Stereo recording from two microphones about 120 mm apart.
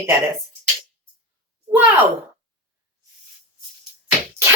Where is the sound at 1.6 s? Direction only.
15° right (ahead or behind).